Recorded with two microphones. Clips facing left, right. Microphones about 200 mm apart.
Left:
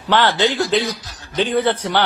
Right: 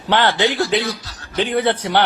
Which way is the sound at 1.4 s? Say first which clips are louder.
Even; 65° right (ahead or behind).